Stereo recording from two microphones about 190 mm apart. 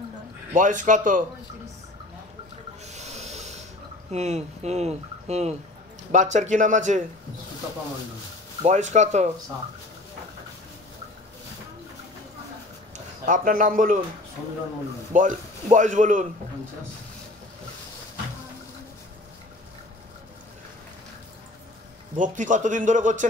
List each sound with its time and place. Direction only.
0.5 s a man's voice: 40° right (ahead or behind)
2.9 s a sound: 35° right (ahead or behind)
4.1 s speech: 35° right (ahead or behind)
8.6 s speech: 40° right (ahead or behind)
12.9 s speech: 45° right (ahead or behind)
15.1 s a man's voice: 40° right (ahead or behind)
22.1 s speech: 40° right (ahead or behind)